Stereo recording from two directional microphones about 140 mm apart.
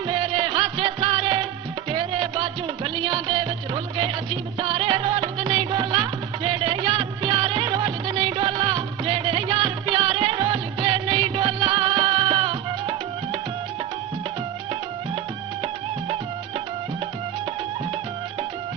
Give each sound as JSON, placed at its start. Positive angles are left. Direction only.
{"t": 0.1, "sound": "music", "side_deg": -35}